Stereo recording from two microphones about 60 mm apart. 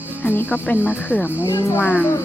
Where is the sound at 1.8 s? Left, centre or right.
Left.